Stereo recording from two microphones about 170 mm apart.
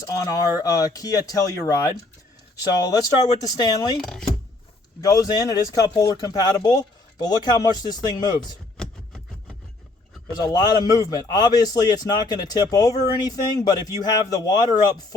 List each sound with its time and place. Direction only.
0.0 s speech: 20° left (ahead or behind)
2.9 s speech: 20° left (ahead or behind)
4.0 s speech: 5° left (ahead or behind)
4.9 s speech: 20° left (ahead or behind)
10.3 s speech: 25° left (ahead or behind)